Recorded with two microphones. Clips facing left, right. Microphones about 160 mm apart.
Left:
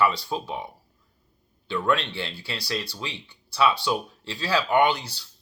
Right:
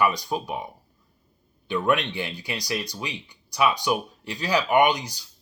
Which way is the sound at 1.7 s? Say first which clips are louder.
Right 1 dB; 15° right (ahead or behind).